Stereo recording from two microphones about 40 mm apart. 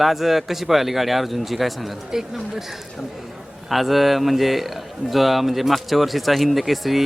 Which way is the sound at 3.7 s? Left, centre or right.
Centre.